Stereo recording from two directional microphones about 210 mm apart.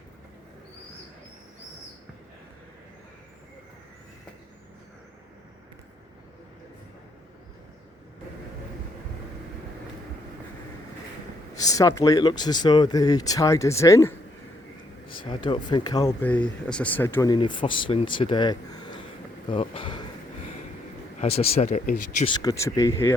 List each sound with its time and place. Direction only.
11.5 s speech: 15° left (ahead or behind)
19.5 s a sound: 25° left (ahead or behind)
21.2 s speech: 30° left (ahead or behind)
22.3 s speech: 15° left (ahead or behind)